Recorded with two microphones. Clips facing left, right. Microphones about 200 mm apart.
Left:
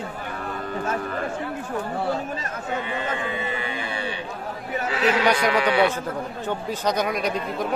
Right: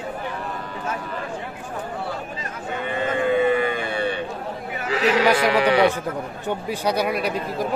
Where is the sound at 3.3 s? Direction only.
55° right (ahead or behind).